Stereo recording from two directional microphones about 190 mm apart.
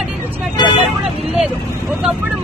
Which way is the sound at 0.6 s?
25° left (ahead or behind).